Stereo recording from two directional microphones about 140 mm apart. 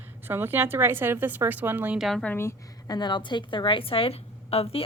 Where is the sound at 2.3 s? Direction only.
20° left (ahead or behind).